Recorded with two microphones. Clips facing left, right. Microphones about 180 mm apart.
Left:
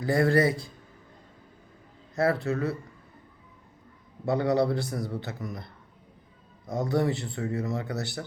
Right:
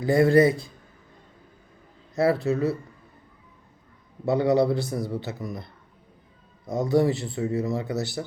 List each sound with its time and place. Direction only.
0.0 s speech: 20° right (ahead or behind)
2.1 s speech: 20° right (ahead or behind)
4.3 s speech: 20° right (ahead or behind)
6.7 s speech: 20° right (ahead or behind)